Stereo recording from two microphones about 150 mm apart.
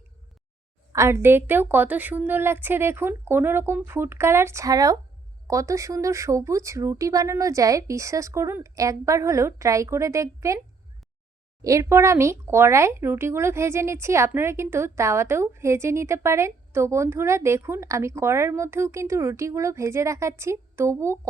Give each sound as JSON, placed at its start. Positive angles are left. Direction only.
{"t": 0.9, "sound": "a woman's voice", "side_deg": -20}
{"t": 11.6, "sound": "speech", "side_deg": -20}